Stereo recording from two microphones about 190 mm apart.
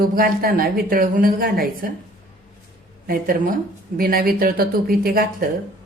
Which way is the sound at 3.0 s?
50° right (ahead or behind).